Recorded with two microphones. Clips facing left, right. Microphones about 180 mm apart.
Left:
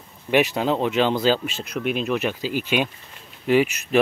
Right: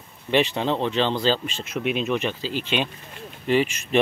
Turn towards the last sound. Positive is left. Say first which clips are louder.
# left 2 dB
turn(degrees=5)  # may be behind; listen again after turning